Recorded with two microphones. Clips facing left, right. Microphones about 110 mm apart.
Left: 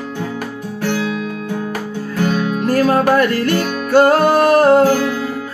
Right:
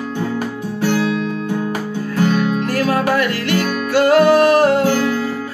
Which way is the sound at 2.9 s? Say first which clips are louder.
Left 2 dB; 35° left (ahead or behind).